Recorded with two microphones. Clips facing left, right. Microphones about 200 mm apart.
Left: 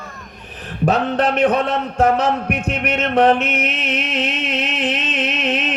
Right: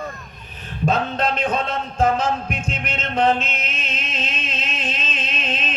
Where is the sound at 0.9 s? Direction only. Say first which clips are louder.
Left 4 dB; 70° left (ahead or behind).